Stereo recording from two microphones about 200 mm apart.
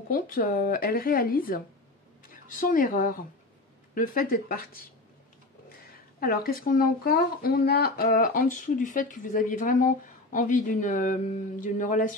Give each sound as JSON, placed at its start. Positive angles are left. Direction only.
{"t": 0.1, "sound": "speech", "side_deg": 45}
{"t": 6.1, "sound": "speech", "side_deg": 50}
{"t": 11.6, "sound": "a sound", "side_deg": 40}